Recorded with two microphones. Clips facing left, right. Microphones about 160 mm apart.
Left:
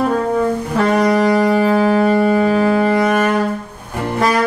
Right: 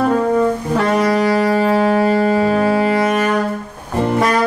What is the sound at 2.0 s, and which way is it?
Music, 30° right (ahead or behind).